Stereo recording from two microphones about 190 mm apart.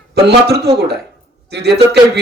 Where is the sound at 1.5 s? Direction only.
60° right (ahead or behind).